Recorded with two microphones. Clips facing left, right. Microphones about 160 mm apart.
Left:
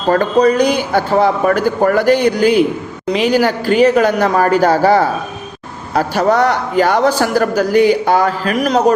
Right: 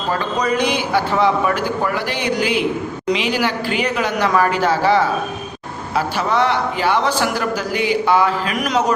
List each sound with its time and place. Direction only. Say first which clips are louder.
0.3 s a man's voice: left 7 dB; 40° left (ahead or behind)